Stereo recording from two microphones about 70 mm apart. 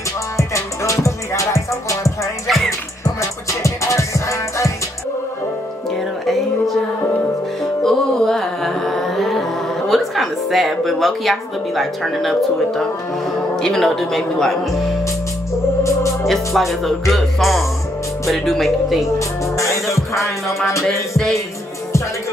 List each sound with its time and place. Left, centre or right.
0.4 s music: left
2.4 s music: centre
3.0 s music: left
6.2 s music: centre
7.8 s music: centre
13.6 s a man's voice: centre
15.8 s organ: left
16.3 s a man's voice: centre
19.0 s music: left